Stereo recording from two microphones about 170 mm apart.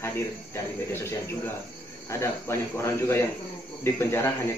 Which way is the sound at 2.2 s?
15° left (ahead or behind).